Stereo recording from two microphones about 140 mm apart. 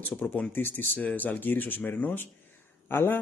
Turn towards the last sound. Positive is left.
turn(degrees=15)  # may be behind; listen again after turning